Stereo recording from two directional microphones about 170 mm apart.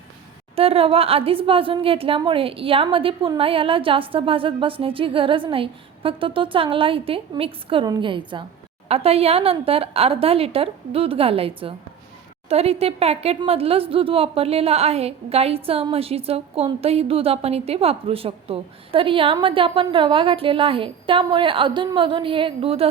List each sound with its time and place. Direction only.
0.5 s speech: 35° right (ahead or behind)